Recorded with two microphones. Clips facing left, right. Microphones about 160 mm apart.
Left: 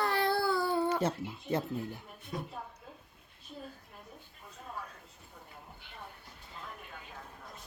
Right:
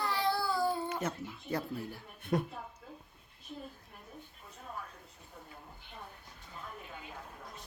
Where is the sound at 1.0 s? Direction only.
25° left (ahead or behind).